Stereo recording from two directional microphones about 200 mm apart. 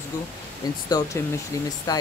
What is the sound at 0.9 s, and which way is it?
Speech, 20° left (ahead or behind).